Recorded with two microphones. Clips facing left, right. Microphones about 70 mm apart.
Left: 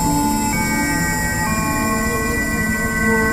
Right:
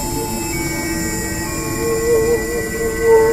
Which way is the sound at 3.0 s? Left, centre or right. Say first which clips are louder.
Right 8 dB; left.